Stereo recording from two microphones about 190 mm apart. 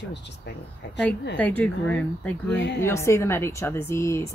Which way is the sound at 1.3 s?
10° left (ahead or behind).